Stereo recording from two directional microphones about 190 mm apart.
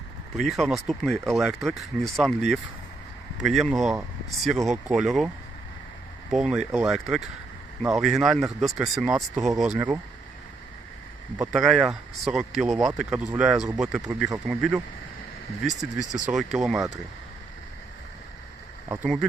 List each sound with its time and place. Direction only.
0.3 s speech: centre (ahead or behind)
6.3 s speech: centre (ahead or behind)
11.3 s speech: centre (ahead or behind)
16.0 s speech: 5° right (ahead or behind)